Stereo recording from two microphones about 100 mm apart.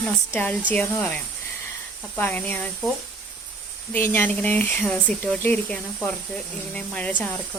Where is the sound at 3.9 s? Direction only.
20° left (ahead or behind).